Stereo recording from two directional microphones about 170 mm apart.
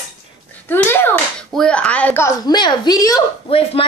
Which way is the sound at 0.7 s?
10° left (ahead or behind).